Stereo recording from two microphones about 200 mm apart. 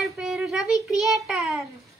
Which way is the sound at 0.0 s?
5° right (ahead or behind).